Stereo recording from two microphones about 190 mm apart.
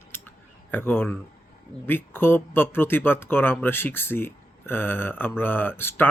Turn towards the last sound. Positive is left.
turn(degrees=10)  # may be behind; listen again after turning